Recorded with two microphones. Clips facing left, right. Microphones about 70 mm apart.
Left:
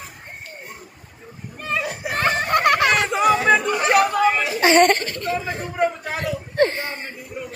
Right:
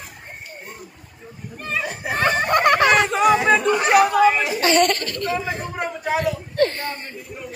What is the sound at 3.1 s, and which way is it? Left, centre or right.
Chatter, centre.